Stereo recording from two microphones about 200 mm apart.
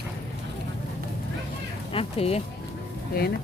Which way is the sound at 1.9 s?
30° left (ahead or behind).